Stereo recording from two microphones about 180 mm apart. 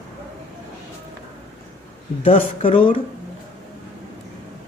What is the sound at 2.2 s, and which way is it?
Speech, 30° left (ahead or behind).